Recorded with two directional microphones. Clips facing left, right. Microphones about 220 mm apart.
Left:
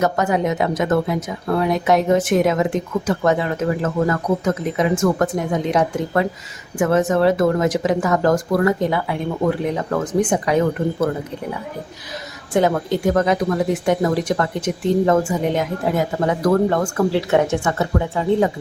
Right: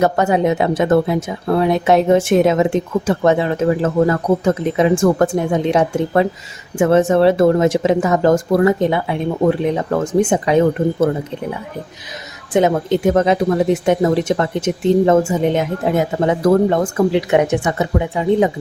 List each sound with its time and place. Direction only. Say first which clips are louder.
0.0 s speech: right 4 dB; 30° right (ahead or behind)
12.5 s speech: right 3 dB; 20° right (ahead or behind)